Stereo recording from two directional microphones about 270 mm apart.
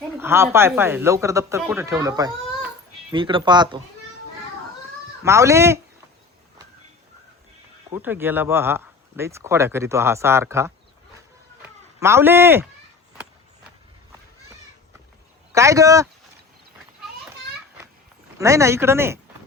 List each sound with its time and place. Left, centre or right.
0.2 s speech: centre
5.2 s speech: centre
7.9 s speech: centre
11.6 s a sound: centre
15.5 s speech: centre
18.3 s speech: centre